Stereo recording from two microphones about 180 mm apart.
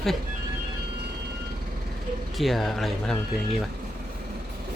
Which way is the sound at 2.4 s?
Centre (ahead or behind).